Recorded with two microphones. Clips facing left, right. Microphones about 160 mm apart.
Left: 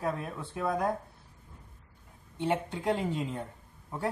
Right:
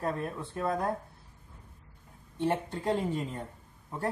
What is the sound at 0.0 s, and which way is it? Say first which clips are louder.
Speech: right 1 dB; 5° left (ahead or behind).